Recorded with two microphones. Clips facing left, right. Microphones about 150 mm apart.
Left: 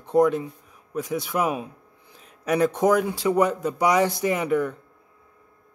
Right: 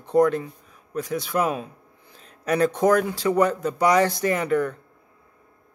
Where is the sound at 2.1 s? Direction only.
10° left (ahead or behind).